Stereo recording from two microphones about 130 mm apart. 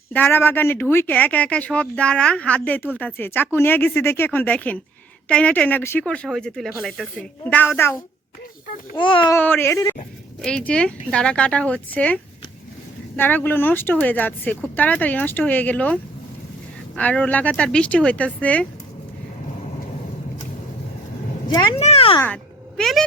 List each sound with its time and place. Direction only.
0.1 s speech: 15° left (ahead or behind)
6.1 s speech: 5° left (ahead or behind)
7.4 s speech: 15° left (ahead or behind)
9.0 s a child's voice: 40° left (ahead or behind)
9.3 s speech: 15° left (ahead or behind)
10.4 s speech: 5° left (ahead or behind)
21.8 s speech: 55° left (ahead or behind)
22.8 s speech: centre (ahead or behind)